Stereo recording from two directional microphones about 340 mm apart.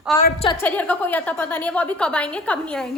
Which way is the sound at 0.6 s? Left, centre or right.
Centre.